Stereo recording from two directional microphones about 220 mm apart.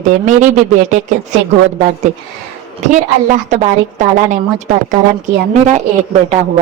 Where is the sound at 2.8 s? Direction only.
35° right (ahead or behind).